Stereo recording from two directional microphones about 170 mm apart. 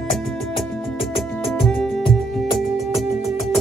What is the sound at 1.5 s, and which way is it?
Music, centre (ahead or behind).